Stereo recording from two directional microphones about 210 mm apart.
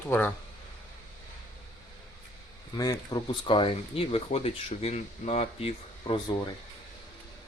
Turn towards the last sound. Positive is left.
turn(degrees=25)  # may be behind; listen again after turning